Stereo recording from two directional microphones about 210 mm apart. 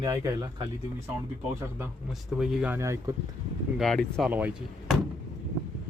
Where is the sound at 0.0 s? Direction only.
15° right (ahead or behind).